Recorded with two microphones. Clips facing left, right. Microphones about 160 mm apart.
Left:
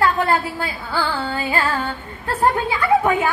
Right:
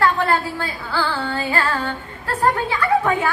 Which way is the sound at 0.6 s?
20° left (ahead or behind).